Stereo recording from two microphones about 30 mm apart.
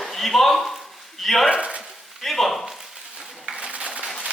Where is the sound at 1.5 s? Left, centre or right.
Right.